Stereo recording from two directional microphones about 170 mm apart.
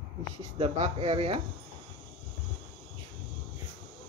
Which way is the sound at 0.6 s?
30° right (ahead or behind).